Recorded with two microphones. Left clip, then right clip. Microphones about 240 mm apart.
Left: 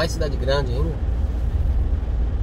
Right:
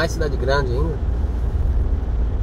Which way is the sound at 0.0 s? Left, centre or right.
Centre.